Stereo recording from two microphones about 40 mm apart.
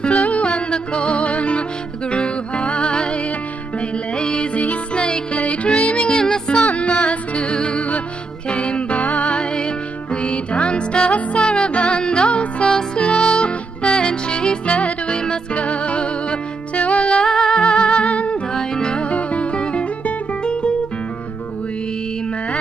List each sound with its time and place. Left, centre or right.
0.2 s music: left
4.6 s music: left
5.0 s music: left
5.4 s music: left
6.0 s music: left
6.8 s music: left
11.0 s music: left
11.3 s music: left
12.6 s music: centre
14.7 s music: left
17.2 s music: centre
18.5 s music: centre
19.0 s music: left